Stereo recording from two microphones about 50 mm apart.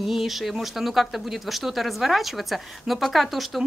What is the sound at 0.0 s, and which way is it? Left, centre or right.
Speech, centre.